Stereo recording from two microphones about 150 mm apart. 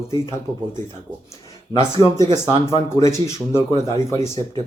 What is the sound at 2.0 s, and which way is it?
Speech, 25° left (ahead or behind).